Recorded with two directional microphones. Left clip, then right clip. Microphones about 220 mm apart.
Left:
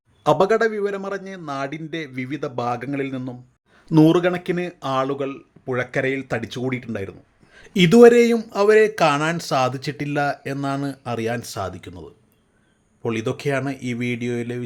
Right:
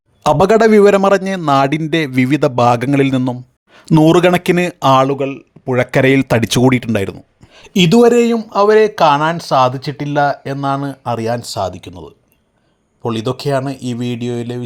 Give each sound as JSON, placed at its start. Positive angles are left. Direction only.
{"t": 0.2, "sound": "speech", "side_deg": -50}
{"t": 7.5, "sound": "a sound", "side_deg": -25}
{"t": 7.9, "sound": "speech", "side_deg": -15}
{"t": 11.3, "sound": "speech", "side_deg": 10}
{"t": 11.7, "sound": "speech", "side_deg": -20}
{"t": 13.1, "sound": "speech", "side_deg": 5}
{"t": 14.2, "sound": "speech", "side_deg": -20}